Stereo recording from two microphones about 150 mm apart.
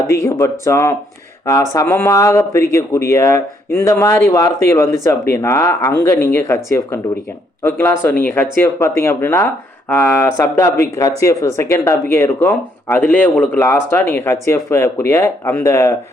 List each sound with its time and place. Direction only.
0.1 s speech: 20° left (ahead or behind)